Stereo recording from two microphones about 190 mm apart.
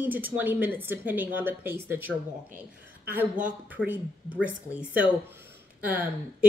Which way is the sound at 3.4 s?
5° right (ahead or behind).